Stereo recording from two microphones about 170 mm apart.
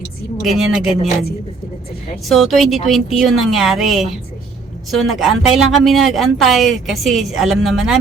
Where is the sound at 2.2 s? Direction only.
Centre (ahead or behind).